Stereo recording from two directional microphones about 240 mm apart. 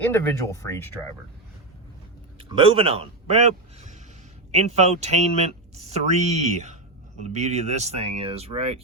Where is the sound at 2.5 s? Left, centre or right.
Right.